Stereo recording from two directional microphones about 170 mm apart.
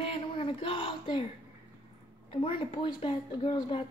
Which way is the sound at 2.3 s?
30° left (ahead or behind).